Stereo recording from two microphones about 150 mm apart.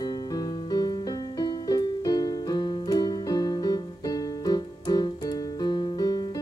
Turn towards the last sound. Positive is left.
turn(degrees=25)  # may be behind; listen again after turning